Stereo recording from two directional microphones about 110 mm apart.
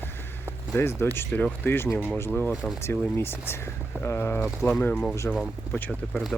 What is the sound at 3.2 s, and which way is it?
Speech, 20° left (ahead or behind).